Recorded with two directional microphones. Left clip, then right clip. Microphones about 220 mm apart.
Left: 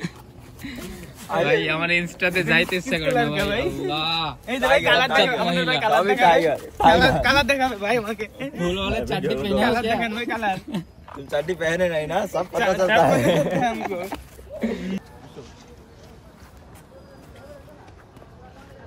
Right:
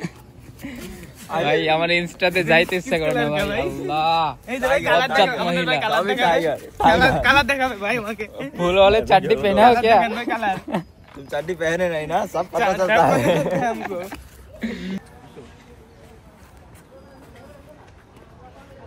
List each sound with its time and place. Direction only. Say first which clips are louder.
0.9 s a man's voice: left 1 dB; centre (ahead or behind)
8.7 s a man's voice: right 15 dB; 30° right (ahead or behind)
9.2 s a man's voice: right 8 dB; 5° right (ahead or behind)